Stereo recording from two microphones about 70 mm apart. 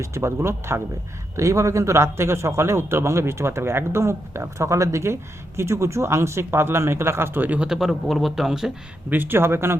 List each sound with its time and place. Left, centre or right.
0.0 s a man's voice: right
1.4 s a man's voice: right
7.7 s speech: centre
9.0 s a man's voice: right